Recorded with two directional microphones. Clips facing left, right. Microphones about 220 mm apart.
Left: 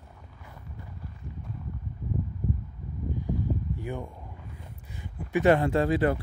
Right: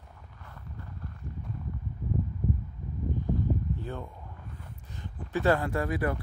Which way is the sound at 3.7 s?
10° left (ahead or behind).